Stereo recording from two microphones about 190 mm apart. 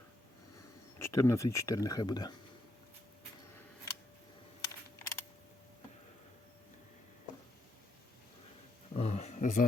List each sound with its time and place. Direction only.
0.9 s speech: 15° left (ahead or behind)
4.6 s camera: 15° left (ahead or behind)
9.0 s a sound: 35° left (ahead or behind)